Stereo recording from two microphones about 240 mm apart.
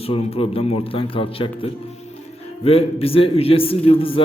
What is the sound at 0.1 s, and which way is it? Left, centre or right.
A man's voice, left.